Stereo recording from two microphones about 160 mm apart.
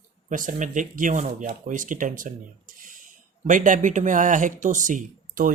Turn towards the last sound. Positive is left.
turn(degrees=-55)  # may be behind; listen again after turning